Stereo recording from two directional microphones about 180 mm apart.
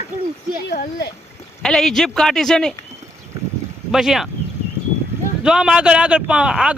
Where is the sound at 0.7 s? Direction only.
65° left (ahead or behind).